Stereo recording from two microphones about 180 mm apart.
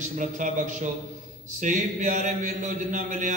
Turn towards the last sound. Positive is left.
turn(degrees=-45)  # may be behind; listen again after turning